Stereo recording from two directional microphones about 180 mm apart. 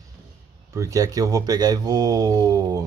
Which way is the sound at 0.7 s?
20° right (ahead or behind).